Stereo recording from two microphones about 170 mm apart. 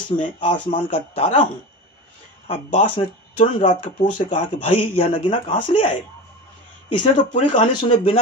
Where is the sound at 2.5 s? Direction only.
35° left (ahead or behind).